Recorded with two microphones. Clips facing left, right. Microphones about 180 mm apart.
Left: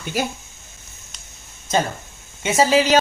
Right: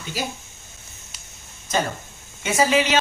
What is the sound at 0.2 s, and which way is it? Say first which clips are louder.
Speech: left 5 dB; 55° left (ahead or behind).